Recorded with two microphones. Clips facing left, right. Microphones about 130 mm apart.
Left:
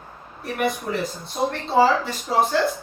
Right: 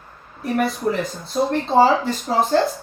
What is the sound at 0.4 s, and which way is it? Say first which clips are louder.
A woman's voice: right 4 dB; 40° right (ahead or behind).